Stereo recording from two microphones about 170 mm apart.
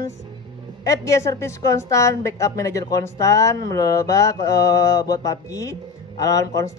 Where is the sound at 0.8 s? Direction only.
20° left (ahead or behind).